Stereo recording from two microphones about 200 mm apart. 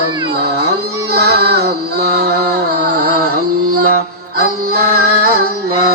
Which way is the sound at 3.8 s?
50° right (ahead or behind).